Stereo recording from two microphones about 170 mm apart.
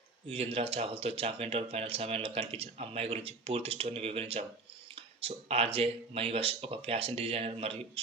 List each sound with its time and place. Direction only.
0.3 s speech: 35° right (ahead or behind)